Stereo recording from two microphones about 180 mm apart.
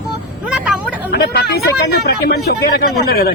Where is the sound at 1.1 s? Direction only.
65° left (ahead or behind).